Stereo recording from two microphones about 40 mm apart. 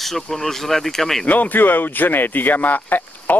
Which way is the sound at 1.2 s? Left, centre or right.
Left.